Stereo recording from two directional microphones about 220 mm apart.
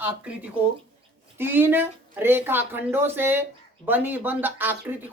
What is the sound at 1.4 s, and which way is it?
Speech, 10° right (ahead or behind).